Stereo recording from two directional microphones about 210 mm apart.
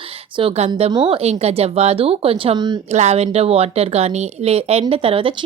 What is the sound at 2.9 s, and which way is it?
A woman's voice, 30° right (ahead or behind).